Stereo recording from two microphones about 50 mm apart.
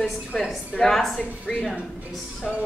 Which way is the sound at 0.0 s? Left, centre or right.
Centre.